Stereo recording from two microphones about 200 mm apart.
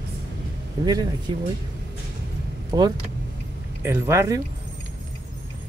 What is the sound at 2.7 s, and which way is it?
Speech, 20° right (ahead or behind).